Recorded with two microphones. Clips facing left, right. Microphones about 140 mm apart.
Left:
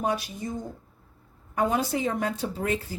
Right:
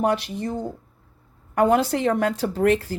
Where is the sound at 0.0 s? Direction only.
70° right (ahead or behind).